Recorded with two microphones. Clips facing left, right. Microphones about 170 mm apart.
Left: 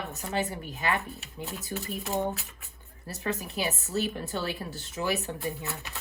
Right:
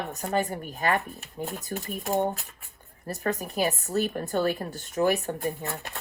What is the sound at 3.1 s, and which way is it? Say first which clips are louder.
A woman's voice: right 4 dB; 50° right (ahead or behind).